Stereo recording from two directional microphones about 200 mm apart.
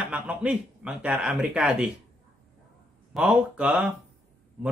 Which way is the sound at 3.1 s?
5° right (ahead or behind).